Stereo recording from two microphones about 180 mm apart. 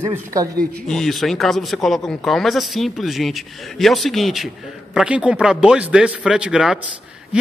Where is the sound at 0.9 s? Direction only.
Centre (ahead or behind).